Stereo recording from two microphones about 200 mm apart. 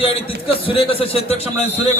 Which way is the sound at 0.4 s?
25° left (ahead or behind).